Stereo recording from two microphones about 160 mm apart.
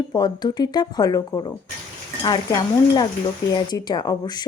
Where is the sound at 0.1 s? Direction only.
25° left (ahead or behind).